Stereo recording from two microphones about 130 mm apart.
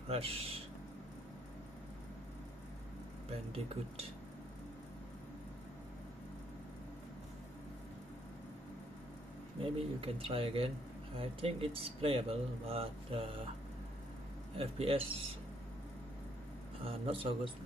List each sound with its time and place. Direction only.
0.1 s speech: 50° right (ahead or behind)
9.6 s speech: 45° right (ahead or behind)
14.6 s speech: 50° right (ahead or behind)
16.8 s speech: 45° right (ahead or behind)